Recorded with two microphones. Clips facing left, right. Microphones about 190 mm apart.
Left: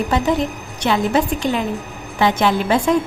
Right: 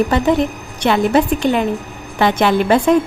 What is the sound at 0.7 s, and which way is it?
A woman's voice, 60° right (ahead or behind).